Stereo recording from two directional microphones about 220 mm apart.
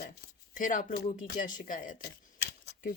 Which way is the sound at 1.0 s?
45° left (ahead or behind).